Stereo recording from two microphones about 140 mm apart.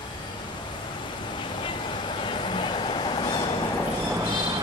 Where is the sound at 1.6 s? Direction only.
35° left (ahead or behind).